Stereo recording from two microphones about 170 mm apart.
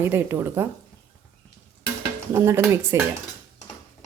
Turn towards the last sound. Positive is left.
turn(degrees=-15)  # may be behind; listen again after turning